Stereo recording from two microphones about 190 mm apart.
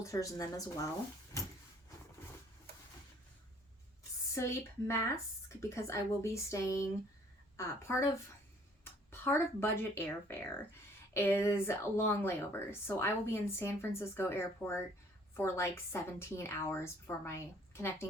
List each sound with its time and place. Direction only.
0.0 s speech: 15° left (ahead or behind)
4.4 s speech: 15° left (ahead or behind)